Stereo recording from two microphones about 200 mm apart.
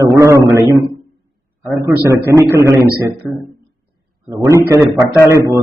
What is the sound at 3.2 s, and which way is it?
Speech, centre (ahead or behind).